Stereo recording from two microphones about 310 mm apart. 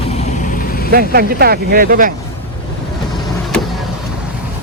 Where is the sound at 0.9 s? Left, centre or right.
Right.